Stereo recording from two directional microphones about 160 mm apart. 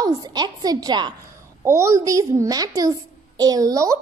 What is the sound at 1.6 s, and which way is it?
A woman's voice, 15° right (ahead or behind).